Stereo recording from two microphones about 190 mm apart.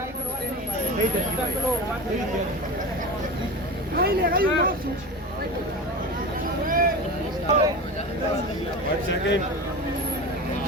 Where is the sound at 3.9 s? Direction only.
55° right (ahead or behind).